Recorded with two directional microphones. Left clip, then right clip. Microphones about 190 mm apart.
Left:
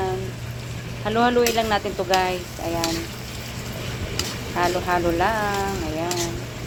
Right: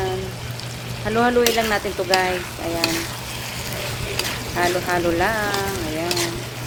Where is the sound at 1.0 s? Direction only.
25° right (ahead or behind).